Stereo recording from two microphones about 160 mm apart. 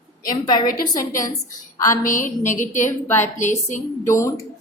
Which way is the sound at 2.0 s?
55° left (ahead or behind).